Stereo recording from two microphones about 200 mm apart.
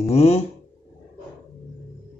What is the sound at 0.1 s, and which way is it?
Speech, 30° left (ahead or behind).